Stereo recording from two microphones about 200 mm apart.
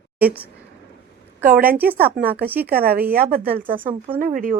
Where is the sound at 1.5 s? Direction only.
45° right (ahead or behind).